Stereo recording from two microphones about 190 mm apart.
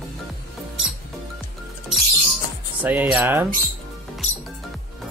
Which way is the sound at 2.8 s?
10° right (ahead or behind).